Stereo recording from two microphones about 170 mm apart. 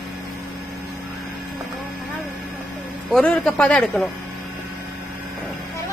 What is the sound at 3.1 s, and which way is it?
Speech, 5° left (ahead or behind).